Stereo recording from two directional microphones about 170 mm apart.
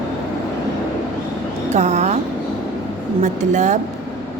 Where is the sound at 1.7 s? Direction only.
40° right (ahead or behind).